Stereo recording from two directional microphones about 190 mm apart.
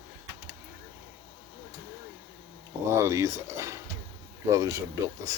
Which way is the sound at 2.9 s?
15° right (ahead or behind).